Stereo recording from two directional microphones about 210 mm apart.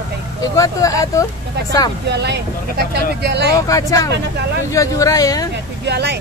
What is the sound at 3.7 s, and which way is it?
Speech, 15° left (ahead or behind).